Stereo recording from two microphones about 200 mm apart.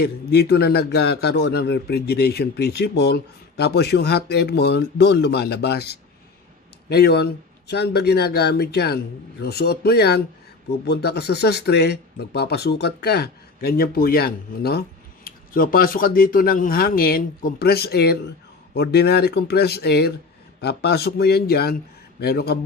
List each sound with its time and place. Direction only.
0.0 s speech: 55° left (ahead or behind)